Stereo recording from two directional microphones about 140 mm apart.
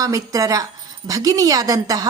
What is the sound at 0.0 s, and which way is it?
A woman's voice, 25° right (ahead or behind).